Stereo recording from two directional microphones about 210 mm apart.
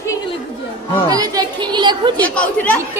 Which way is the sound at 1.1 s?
20° right (ahead or behind).